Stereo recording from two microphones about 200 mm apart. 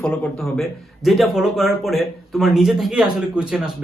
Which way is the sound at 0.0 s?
5° left (ahead or behind).